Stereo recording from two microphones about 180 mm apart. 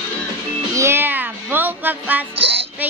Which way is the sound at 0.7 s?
15° right (ahead or behind).